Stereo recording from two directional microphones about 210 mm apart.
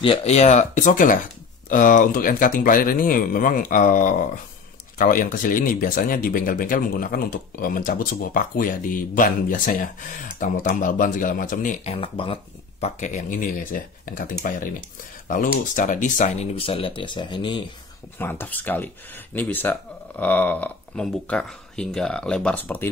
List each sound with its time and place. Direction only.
0.0 s speech: 25° left (ahead or behind)
18.1 s speech: 10° left (ahead or behind)